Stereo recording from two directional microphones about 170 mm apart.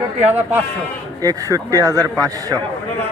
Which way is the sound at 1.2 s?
20° right (ahead or behind).